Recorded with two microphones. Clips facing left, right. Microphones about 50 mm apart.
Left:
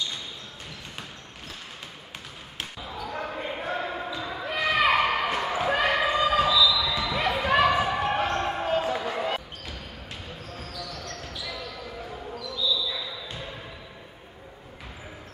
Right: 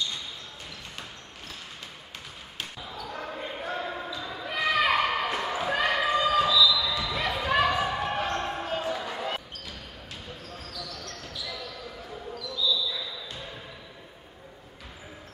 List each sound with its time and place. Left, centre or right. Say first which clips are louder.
2.9 s basketball bounce: left 5 dB; centre
11.1 s basketball bounce: left 2 dB; left
12.9 s basketball bounce: left 2 dB; left